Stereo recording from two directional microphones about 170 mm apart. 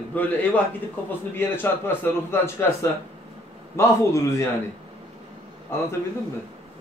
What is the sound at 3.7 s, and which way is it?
Speech, 15° left (ahead or behind).